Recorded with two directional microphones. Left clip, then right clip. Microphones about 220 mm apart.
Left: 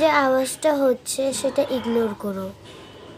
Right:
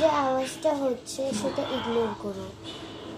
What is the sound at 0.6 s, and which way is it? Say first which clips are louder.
Speech: left 7 dB; 45° left (ahead or behind).